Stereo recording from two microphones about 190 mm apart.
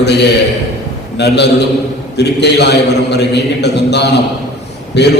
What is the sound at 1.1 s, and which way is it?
A man's voice, 65° left (ahead or behind).